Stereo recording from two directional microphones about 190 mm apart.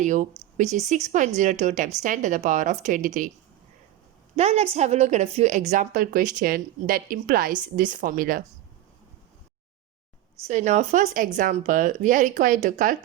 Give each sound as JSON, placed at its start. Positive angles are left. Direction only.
{"t": 0.0, "sound": "a woman's voice", "side_deg": -40}
{"t": 4.4, "sound": "a woman's voice", "side_deg": -35}
{"t": 10.4, "sound": "a woman's voice", "side_deg": -40}